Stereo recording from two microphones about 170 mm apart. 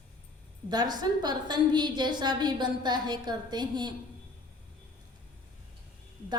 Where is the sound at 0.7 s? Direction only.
25° right (ahead or behind).